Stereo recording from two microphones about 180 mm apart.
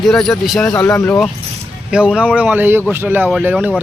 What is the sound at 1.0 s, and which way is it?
Speech, 15° left (ahead or behind).